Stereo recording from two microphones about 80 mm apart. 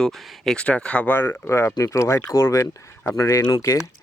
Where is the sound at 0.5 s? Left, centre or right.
Centre.